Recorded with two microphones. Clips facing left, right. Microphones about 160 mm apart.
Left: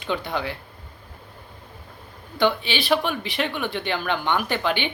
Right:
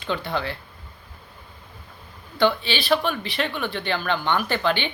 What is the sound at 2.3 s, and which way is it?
Speech, 15° left (ahead or behind).